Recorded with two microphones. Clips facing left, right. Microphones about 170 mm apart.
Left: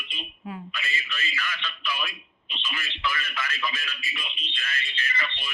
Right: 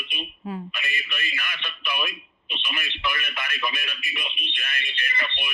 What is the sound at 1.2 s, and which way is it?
Speech, 55° right (ahead or behind).